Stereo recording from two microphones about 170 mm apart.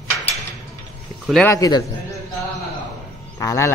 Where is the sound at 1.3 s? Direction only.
5° left (ahead or behind).